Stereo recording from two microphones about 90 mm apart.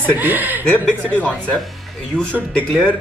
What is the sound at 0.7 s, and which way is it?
Speech, 15° left (ahead or behind).